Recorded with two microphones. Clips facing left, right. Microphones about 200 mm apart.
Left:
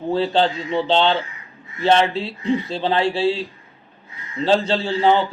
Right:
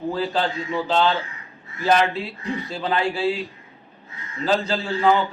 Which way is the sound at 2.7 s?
30° left (ahead or behind).